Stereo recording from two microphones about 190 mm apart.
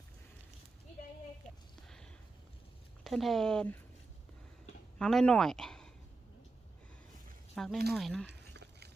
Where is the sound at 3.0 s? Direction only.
Centre (ahead or behind).